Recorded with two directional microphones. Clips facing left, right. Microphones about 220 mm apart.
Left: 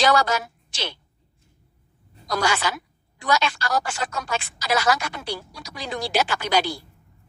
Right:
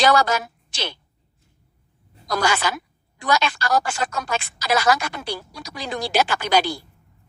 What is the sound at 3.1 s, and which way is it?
A woman's voice, 50° right (ahead or behind).